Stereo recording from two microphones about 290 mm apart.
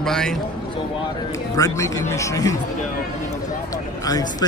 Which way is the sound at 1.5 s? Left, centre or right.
Centre.